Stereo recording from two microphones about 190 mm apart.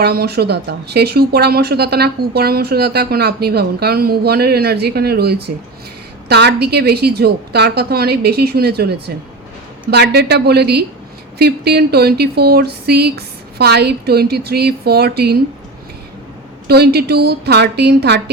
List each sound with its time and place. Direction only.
0.0 s speech: 55° right (ahead or behind)
16.6 s speech: 55° right (ahead or behind)